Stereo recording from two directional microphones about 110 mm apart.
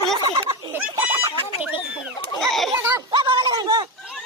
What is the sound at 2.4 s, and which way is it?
Children playing, centre (ahead or behind).